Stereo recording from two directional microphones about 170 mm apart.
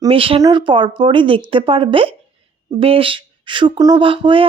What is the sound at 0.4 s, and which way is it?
A woman's voice, 30° right (ahead or behind).